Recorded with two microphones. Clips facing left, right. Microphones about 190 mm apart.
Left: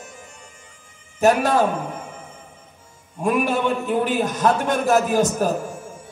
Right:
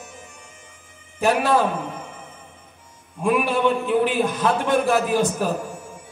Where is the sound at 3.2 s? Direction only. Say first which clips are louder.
Right 1 dB; 45° left (ahead or behind).